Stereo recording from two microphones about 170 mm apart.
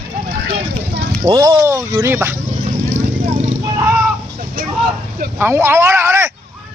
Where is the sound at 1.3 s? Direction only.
25° right (ahead or behind).